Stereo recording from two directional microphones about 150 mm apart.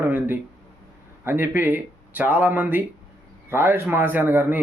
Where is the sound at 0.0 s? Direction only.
10° right (ahead or behind).